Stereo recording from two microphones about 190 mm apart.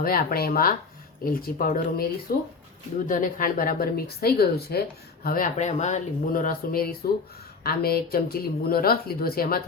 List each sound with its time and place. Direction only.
0.0 s speech: 50° left (ahead or behind)